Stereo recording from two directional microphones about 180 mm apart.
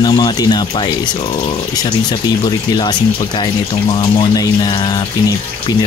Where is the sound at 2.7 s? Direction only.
25° left (ahead or behind).